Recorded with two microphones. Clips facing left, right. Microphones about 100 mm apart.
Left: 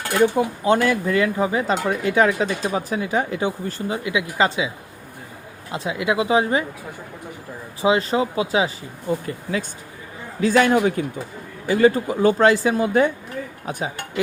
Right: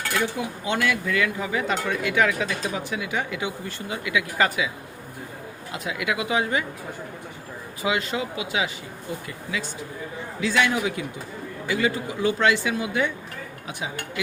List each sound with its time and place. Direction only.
0.0 s speech: 30° left (ahead or behind)
5.7 s speech: 30° left (ahead or behind)
7.8 s a man's voice: 35° left (ahead or behind)